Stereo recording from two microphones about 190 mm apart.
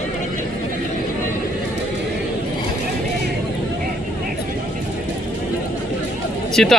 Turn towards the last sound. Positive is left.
turn(degrees=5)  # may be behind; listen again after turning